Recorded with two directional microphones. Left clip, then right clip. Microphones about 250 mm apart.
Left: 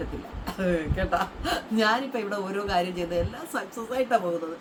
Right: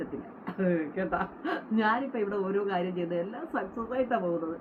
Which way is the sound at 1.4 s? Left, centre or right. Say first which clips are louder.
Left 3 dB; centre.